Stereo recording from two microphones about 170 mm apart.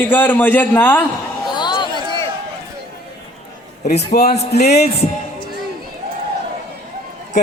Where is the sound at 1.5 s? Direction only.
25° left (ahead or behind).